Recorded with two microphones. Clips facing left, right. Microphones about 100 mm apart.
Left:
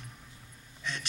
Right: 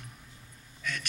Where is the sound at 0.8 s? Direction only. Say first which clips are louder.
Right 1 dB; 25° left (ahead or behind).